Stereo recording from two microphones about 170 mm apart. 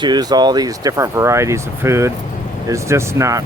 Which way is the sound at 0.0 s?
25° right (ahead or behind).